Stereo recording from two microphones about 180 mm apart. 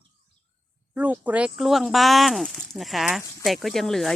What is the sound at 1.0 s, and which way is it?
Speech, 10° right (ahead or behind).